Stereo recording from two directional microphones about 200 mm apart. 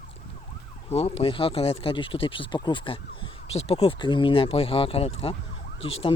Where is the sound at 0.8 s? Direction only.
30° left (ahead or behind).